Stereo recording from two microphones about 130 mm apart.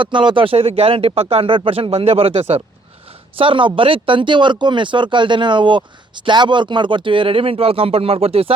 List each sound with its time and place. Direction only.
0.0 s speech: 40° right (ahead or behind)